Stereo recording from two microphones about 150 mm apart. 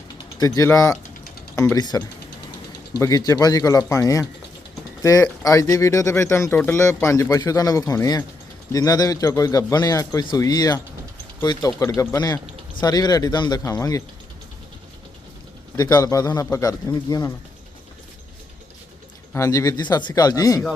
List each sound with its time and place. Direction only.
0.3 s speech: 20° left (ahead or behind)
15.8 s speech: 25° left (ahead or behind)
19.3 s speech: 20° left (ahead or behind)